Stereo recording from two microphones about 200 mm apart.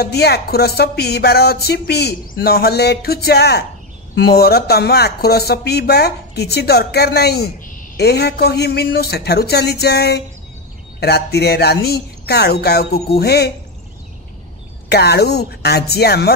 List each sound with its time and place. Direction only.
0.0 s music: 55° left (ahead or behind)
14.9 s music: 55° left (ahead or behind)